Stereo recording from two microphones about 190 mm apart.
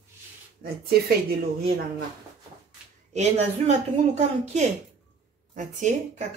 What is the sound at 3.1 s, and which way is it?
Speech, 35° right (ahead or behind).